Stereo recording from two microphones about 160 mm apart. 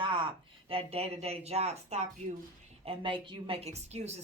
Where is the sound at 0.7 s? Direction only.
40° right (ahead or behind).